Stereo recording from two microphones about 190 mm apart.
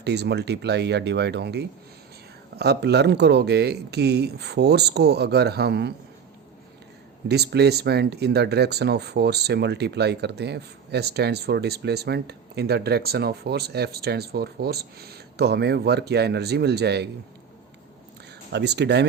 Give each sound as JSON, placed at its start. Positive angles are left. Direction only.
{"t": 0.0, "sound": "speech", "side_deg": -60}
{"t": 7.3, "sound": "speech", "side_deg": -60}
{"t": 18.5, "sound": "speech", "side_deg": -60}